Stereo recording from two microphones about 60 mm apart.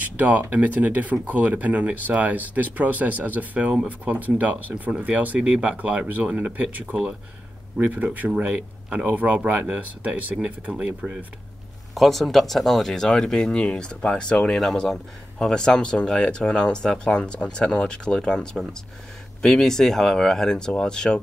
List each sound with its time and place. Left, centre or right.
0.0 s speech: right
11.9 s speech: centre